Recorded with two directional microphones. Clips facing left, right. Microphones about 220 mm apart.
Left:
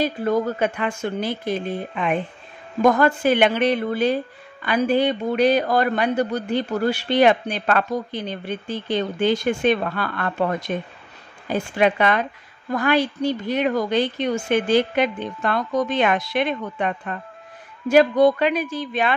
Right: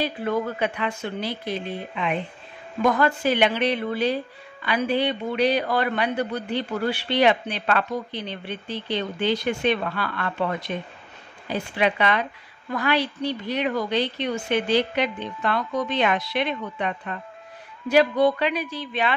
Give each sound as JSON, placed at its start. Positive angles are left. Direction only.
{"t": 0.0, "sound": "speech", "side_deg": 40}